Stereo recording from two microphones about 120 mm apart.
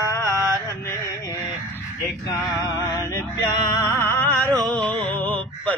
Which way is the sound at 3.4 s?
35° left (ahead or behind).